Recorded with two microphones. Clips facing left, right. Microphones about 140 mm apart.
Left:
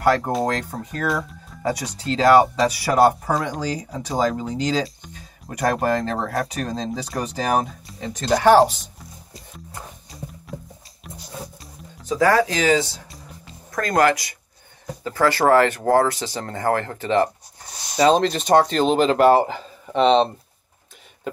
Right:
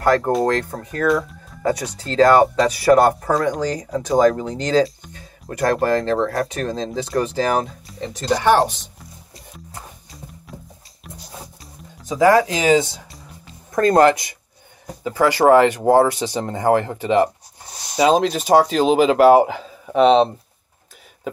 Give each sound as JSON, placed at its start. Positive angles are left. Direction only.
{"t": 0.0, "sound": "speech", "side_deg": 0}
{"t": 11.1, "sound": "music", "side_deg": 0}
{"t": 12.1, "sound": "speech", "side_deg": -20}
{"t": 15.0, "sound": "speech", "side_deg": -15}